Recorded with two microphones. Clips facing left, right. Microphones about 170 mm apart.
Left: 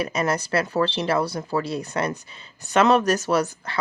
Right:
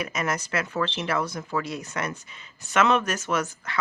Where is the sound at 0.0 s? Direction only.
35° left (ahead or behind).